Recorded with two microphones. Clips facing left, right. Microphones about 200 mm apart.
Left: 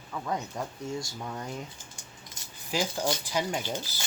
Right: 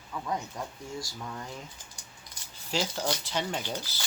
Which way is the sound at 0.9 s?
25° left (ahead or behind).